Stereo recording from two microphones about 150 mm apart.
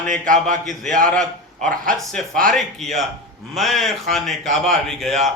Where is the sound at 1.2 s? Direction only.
5° left (ahead or behind).